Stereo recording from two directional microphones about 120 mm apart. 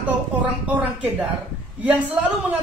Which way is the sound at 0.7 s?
15° right (ahead or behind).